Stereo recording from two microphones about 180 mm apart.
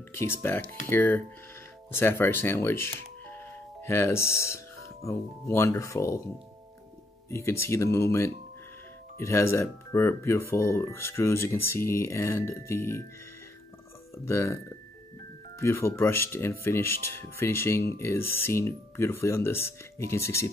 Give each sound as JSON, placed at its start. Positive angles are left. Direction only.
{"t": 0.1, "sound": "speech", "side_deg": 10}
{"t": 7.2, "sound": "speech", "side_deg": 15}
{"t": 14.1, "sound": "speech", "side_deg": 15}